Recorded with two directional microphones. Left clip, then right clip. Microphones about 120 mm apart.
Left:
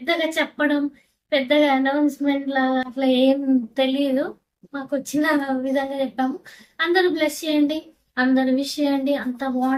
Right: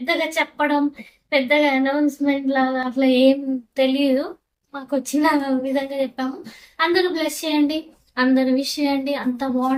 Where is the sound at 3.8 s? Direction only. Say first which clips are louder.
Right 5 dB; 20° right (ahead or behind).